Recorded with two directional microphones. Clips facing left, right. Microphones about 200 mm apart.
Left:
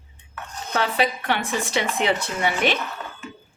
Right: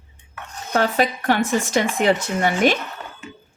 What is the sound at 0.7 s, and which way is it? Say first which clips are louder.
Speech: right 3 dB; 45° right (ahead or behind).